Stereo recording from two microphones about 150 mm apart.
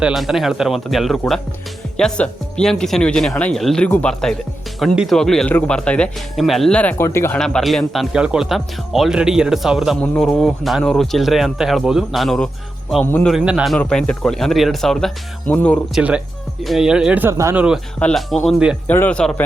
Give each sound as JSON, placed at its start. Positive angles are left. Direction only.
{"t": 0.0, "sound": "speech", "side_deg": 0}
{"t": 6.9, "sound": "a man's voice", "side_deg": 15}
{"t": 7.3, "sound": "speech", "side_deg": 5}
{"t": 13.7, "sound": "speech", "side_deg": 5}
{"t": 16.0, "sound": "a man's voice", "side_deg": -10}
{"t": 18.0, "sound": "speech", "side_deg": 0}
{"t": 18.9, "sound": "a man's voice", "side_deg": 10}